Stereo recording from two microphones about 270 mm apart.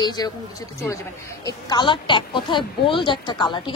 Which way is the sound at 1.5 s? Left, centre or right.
Centre.